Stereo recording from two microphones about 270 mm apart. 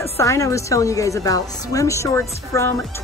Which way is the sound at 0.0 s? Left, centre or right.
Centre.